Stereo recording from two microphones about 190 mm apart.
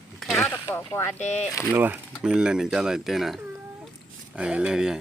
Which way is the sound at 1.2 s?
35° left (ahead or behind).